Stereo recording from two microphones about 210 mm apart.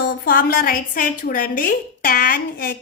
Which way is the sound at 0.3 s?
45° left (ahead or behind).